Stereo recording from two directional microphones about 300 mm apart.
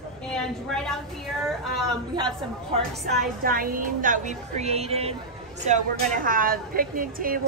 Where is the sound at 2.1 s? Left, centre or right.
Centre.